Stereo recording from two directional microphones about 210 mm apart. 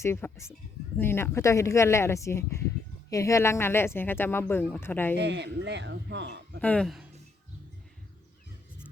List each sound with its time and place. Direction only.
0.0 s speech: 10° left (ahead or behind)
5.1 s speech: 55° right (ahead or behind)
6.6 s speech: 5° left (ahead or behind)